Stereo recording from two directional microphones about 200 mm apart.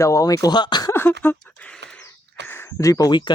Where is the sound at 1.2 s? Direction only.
10° left (ahead or behind).